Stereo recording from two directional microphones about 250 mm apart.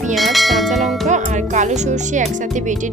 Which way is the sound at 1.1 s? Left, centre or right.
Right.